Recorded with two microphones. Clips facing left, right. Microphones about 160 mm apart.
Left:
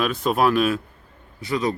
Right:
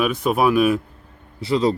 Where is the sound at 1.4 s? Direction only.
25° right (ahead or behind).